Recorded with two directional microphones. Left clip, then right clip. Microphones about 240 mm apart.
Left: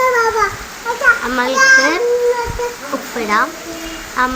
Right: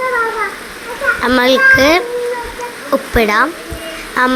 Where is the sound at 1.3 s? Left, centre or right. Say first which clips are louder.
Right 7 dB; right.